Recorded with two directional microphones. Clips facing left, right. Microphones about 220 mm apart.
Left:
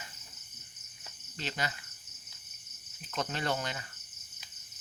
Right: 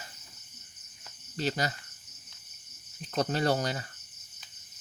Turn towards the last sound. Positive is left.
turn(degrees=-40)  # may be behind; listen again after turning